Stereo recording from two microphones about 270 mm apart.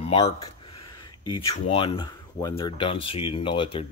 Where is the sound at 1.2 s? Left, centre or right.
Left.